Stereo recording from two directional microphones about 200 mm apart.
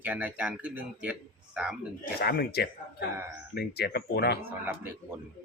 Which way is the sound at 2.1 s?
50° left (ahead or behind).